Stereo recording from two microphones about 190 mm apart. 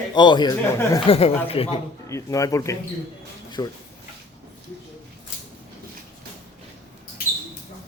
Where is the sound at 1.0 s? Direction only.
30° left (ahead or behind).